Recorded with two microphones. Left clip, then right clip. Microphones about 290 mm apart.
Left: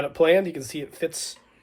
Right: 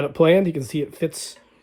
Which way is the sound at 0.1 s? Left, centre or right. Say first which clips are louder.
Right 2 dB; right.